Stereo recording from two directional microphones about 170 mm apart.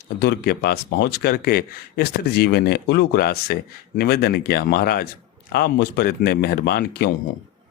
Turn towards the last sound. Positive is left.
turn(degrees=70)  # may be behind; listen again after turning